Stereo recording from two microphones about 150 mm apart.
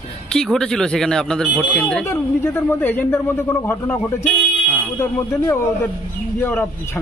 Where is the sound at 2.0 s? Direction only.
15° left (ahead or behind).